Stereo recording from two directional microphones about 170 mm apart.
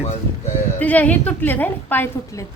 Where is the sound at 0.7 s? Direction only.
10° left (ahead or behind).